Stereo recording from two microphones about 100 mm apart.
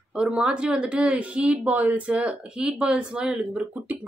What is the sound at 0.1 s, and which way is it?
Speech, 10° right (ahead or behind).